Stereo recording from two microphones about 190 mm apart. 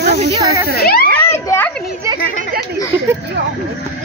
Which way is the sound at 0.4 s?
15° right (ahead or behind).